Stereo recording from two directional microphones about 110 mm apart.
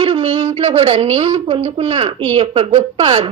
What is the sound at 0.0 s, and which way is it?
A woman's voice, 55° right (ahead or behind).